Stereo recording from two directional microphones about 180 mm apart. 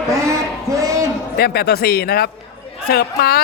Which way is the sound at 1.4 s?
60° left (ahead or behind).